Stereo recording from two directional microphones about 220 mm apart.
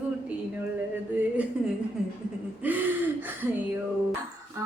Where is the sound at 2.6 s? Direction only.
10° right (ahead or behind).